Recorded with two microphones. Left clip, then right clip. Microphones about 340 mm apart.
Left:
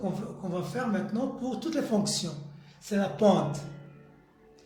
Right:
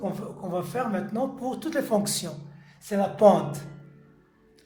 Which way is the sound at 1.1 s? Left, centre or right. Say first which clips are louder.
Right 4 dB; right.